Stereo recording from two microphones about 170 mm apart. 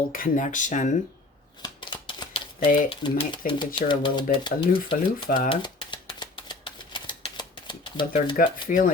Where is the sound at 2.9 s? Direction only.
30° left (ahead or behind).